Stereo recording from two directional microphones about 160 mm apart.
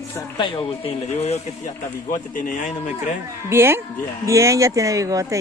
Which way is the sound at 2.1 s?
55° left (ahead or behind).